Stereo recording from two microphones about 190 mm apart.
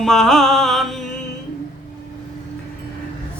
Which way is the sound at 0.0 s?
Centre (ahead or behind).